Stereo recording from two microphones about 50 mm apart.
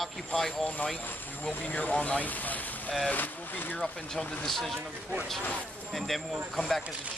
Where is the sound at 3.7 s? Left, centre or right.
Centre.